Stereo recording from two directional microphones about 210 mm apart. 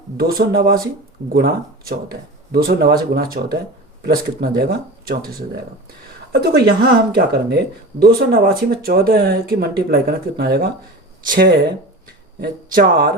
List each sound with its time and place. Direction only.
0.2 s speech: 45° right (ahead or behind)